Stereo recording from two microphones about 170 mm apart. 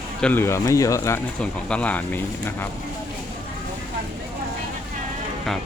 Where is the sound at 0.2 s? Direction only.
10° left (ahead or behind).